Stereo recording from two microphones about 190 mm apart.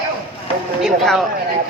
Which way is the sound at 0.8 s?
Centre (ahead or behind).